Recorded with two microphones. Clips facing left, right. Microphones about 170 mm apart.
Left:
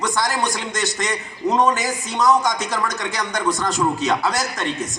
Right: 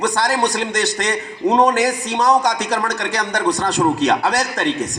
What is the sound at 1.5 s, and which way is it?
Speech, 35° right (ahead or behind).